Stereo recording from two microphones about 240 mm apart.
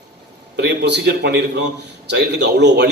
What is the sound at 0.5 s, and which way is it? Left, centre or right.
A man's voice, right.